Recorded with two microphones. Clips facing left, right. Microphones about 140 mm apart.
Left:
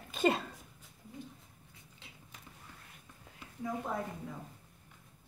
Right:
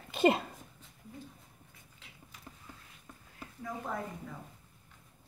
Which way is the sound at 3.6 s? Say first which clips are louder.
Left 2 dB; 15° left (ahead or behind).